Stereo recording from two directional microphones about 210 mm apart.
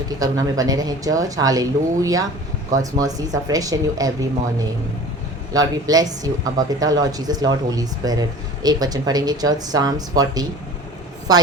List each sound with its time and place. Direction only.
0.2 s speech: 15° right (ahead or behind)
5.5 s speech: 15° right (ahead or behind)